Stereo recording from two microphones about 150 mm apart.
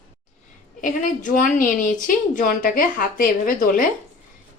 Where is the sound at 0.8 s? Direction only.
60° left (ahead or behind).